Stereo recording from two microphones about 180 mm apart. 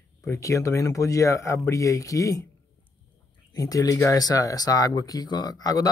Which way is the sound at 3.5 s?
20° left (ahead or behind).